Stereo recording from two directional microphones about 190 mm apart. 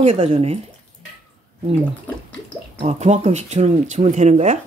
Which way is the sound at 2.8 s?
35° right (ahead or behind).